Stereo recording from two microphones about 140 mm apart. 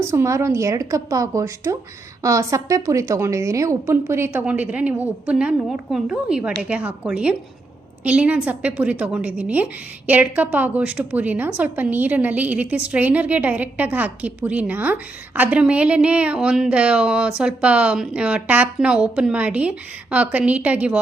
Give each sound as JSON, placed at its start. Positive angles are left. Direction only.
{"t": 0.0, "sound": "a woman's voice", "side_deg": -20}